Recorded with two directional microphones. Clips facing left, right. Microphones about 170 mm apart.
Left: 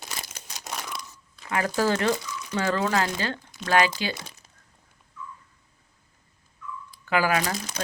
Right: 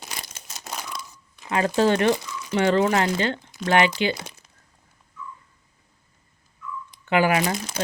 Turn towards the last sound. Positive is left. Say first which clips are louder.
# right 3 dB
turn(degrees=-30)  # may be behind; listen again after turning